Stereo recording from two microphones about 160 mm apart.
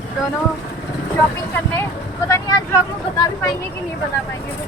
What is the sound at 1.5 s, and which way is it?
Speech, 15° left (ahead or behind).